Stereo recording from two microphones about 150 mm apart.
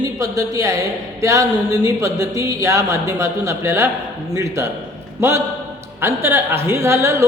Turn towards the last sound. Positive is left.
turn(degrees=-20)  # may be behind; listen again after turning